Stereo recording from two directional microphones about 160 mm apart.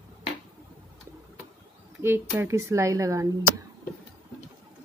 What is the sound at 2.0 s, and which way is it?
Speech, 15° right (ahead or behind).